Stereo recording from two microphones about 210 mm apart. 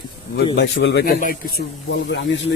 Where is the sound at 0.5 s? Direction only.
55° left (ahead or behind).